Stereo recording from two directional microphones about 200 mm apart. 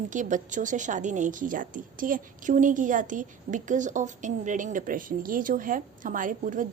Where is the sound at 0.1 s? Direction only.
40° right (ahead or behind).